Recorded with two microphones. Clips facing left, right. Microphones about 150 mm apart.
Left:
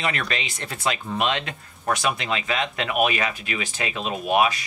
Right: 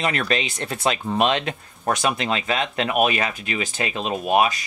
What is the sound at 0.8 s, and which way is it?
Speech, 35° right (ahead or behind).